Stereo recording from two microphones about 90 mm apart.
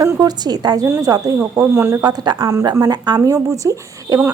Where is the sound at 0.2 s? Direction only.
50° right (ahead or behind).